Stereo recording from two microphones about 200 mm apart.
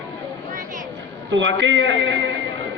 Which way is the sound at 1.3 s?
65° right (ahead or behind).